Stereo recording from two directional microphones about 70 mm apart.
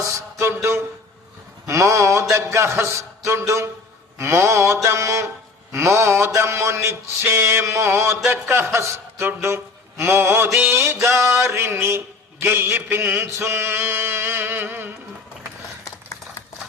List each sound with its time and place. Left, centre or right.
0.0 s a sound: right
11.4 s a man's voice: right
12.5 s mantra: right
15.8 s typewriter: left